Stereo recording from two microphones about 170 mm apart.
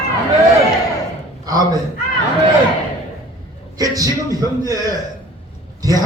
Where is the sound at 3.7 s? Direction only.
20° right (ahead or behind).